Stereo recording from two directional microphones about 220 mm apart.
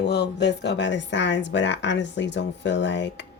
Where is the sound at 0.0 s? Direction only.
50° left (ahead or behind).